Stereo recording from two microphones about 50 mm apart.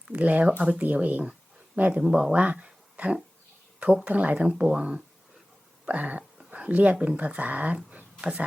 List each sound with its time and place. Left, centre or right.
0.1 s speech: right
2.3 s speech: right
5.8 s a sound: right
7.2 s speech: right